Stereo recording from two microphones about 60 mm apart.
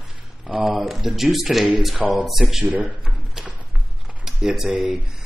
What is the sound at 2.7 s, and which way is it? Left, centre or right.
Speech, right.